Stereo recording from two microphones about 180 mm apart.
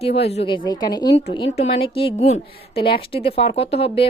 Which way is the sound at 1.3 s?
35° left (ahead or behind).